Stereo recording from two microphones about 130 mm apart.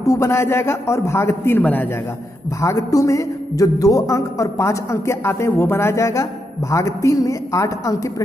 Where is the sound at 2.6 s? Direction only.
25° left (ahead or behind).